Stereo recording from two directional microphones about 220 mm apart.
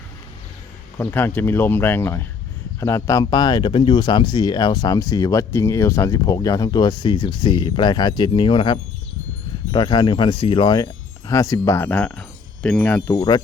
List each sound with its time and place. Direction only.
0.9 s speech: 10° left (ahead or behind)